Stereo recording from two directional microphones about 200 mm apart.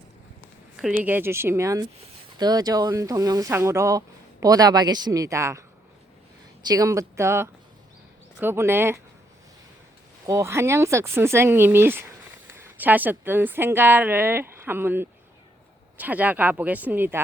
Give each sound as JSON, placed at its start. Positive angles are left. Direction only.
{"t": 0.8, "sound": "speech", "side_deg": -5}
{"t": 10.2, "sound": "a woman's voice", "side_deg": -15}